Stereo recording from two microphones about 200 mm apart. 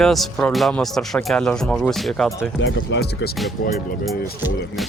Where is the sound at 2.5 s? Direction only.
75° left (ahead or behind).